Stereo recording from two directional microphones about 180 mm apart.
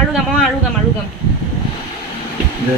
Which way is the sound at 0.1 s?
Centre (ahead or behind).